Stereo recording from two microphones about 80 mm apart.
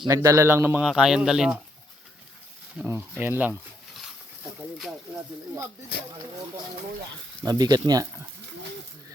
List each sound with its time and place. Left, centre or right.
0.1 s a man's voice: right
0.4 s speech: right
0.8 s speech: centre
2.8 s speech: right
4.8 s speech: centre
7.4 s speech: right